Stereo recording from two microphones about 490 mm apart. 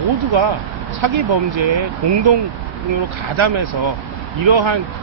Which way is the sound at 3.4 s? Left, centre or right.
Right.